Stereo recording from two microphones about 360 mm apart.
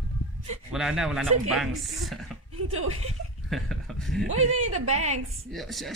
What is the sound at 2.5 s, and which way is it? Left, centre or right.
Speech, right.